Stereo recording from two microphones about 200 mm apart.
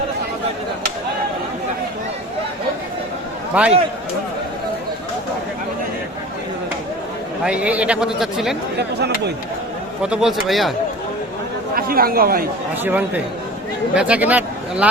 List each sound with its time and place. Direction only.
3.6 s speech: 5° right (ahead or behind)
7.4 s a man's voice: 5° right (ahead or behind)
8.8 s speech: 55° right (ahead or behind)
10.0 s a man's voice: 5° right (ahead or behind)
11.7 s speech: 45° right (ahead or behind)
12.8 s speech: 10° right (ahead or behind)